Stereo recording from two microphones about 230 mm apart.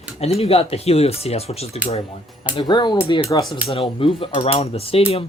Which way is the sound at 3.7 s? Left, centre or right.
Left.